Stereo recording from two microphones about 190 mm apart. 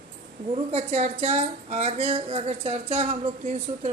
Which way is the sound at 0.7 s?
35° right (ahead or behind).